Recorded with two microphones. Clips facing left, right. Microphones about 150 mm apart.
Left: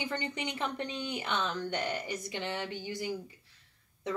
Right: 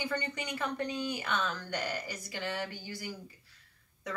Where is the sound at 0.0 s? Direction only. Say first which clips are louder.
Even; 25° left (ahead or behind).